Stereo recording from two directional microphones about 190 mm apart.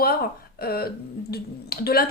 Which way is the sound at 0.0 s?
55° left (ahead or behind).